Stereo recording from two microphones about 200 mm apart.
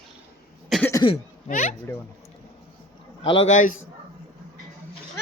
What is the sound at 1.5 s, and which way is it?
Speech, 40° left (ahead or behind).